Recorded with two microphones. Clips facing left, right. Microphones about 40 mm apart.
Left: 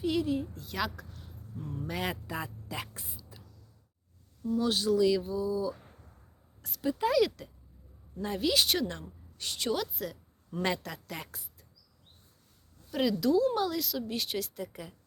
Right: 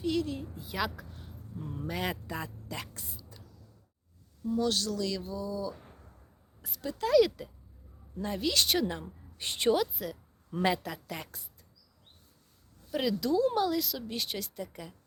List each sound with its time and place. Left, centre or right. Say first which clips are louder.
0.0 s speech: left 2 dB; centre
0.5 s a woman's voice: even; centre
1.2 s a sound: right 1 dB; centre
1.6 s a woman's voice: even; centre
1.9 s speech: even; centre
4.6 s speech: left 7 dB; centre
6.6 s a sound: even; centre
6.8 s speech: right 2 dB; centre
7.2 s speech: right 2 dB; centre
8.9 s a woman's voice: right 3 dB; centre
9.4 s a woman's voice: right 5 dB; right
9.7 s speech: right 4 dB; centre
12.9 s speech: left 2 dB; centre